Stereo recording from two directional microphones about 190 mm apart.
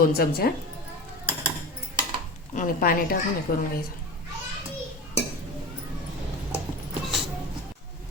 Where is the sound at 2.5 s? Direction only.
45° left (ahead or behind).